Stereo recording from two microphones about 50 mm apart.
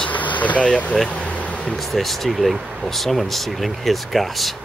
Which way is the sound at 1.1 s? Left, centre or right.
Left.